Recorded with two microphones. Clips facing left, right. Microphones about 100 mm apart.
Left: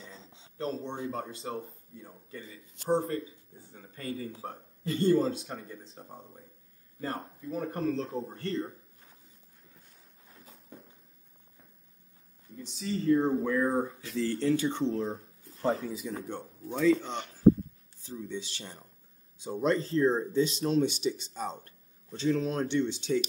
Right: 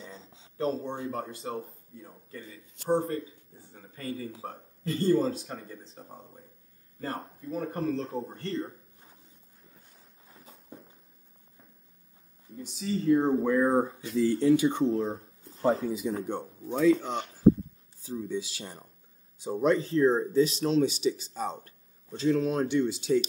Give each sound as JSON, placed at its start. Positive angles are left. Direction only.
{"t": 0.7, "sound": "speech", "side_deg": -15}
{"t": 0.9, "sound": "speech", "side_deg": 0}
{"t": 10.2, "sound": "a sound", "side_deg": 0}
{"t": 12.7, "sound": "speech", "side_deg": 0}
{"t": 13.2, "sound": "speech", "side_deg": -20}
{"t": 16.3, "sound": "speech", "side_deg": -15}